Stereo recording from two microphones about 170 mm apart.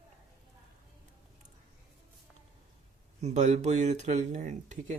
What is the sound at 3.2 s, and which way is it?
Speech, 40° right (ahead or behind).